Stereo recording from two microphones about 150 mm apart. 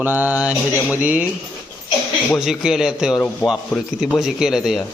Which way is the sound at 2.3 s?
5° right (ahead or behind).